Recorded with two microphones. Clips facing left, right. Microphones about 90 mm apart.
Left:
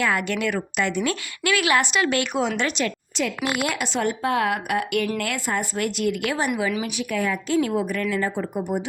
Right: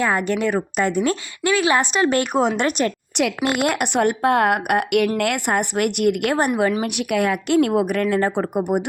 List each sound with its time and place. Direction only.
0.0 s a woman's voice: 35° right (ahead or behind); by 8.8 s 60° right (ahead or behind)